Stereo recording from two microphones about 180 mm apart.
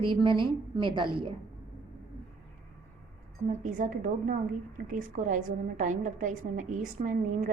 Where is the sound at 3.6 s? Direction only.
45° right (ahead or behind).